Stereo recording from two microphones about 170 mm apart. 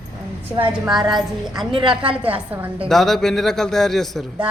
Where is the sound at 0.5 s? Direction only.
5° right (ahead or behind).